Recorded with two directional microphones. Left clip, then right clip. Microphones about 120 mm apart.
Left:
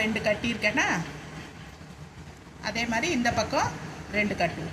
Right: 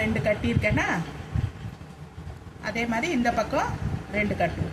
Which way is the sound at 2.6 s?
25° right (ahead or behind).